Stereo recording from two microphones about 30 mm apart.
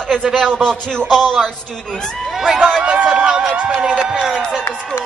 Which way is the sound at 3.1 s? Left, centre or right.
Right.